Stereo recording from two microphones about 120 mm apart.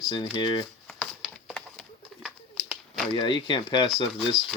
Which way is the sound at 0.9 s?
5° left (ahead or behind).